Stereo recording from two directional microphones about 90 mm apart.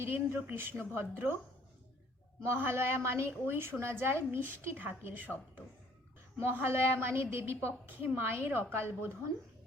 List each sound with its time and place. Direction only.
0.0 s a woman's voice: 25° right (ahead or behind)
2.4 s a woman's voice: 25° right (ahead or behind)